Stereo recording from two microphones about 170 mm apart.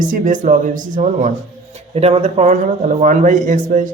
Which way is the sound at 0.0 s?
50° right (ahead or behind).